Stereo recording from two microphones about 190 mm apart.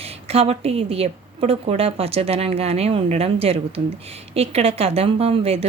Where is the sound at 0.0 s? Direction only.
30° right (ahead or behind).